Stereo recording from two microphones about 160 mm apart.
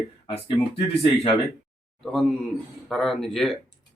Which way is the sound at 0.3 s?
35° left (ahead or behind).